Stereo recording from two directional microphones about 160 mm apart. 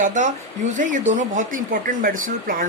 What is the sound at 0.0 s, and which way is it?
Speech, 50° right (ahead or behind).